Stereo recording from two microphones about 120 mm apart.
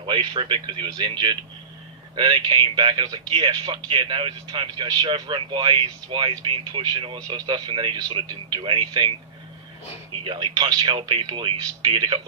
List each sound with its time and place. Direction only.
0.1 s speech: 45° right (ahead or behind)
10.2 s speech: 40° right (ahead or behind)